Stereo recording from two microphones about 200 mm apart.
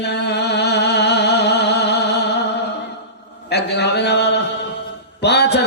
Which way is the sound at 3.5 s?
55° left (ahead or behind).